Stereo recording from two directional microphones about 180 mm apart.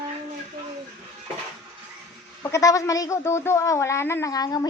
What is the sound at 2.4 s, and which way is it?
A man's voice, 15° left (ahead or behind).